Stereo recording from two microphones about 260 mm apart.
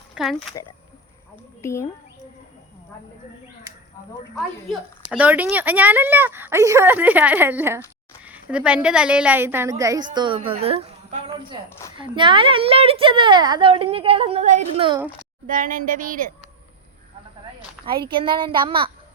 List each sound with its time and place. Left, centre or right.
0.1 s a sound: centre
1.6 s speech: centre
5.1 s a woman's voice: centre
15.4 s speech: right
17.8 s a woman's voice: centre